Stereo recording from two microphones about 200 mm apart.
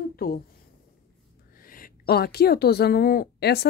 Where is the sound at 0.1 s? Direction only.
50° left (ahead or behind).